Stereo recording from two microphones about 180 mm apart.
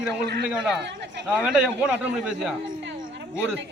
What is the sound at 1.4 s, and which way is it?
A man's voice, 5° right (ahead or behind).